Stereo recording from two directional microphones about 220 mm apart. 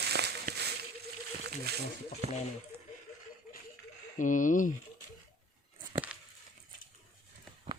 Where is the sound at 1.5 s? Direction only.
45° right (ahead or behind).